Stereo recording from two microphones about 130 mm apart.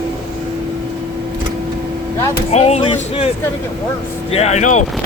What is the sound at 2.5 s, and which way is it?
Speech, 55° left (ahead or behind).